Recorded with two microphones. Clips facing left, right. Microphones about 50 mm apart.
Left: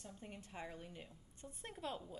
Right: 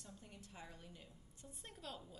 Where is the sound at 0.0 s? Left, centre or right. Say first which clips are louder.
Left 5 dB; left.